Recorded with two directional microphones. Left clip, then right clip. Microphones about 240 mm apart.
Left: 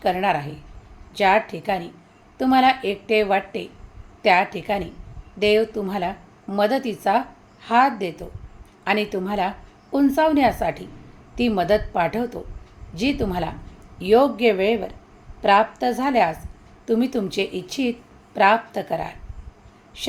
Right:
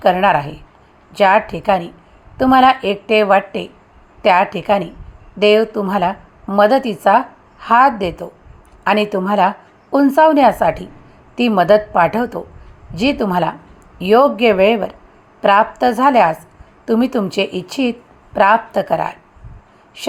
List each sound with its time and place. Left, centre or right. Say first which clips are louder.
0.0 s a woman's voice: right 8 dB; centre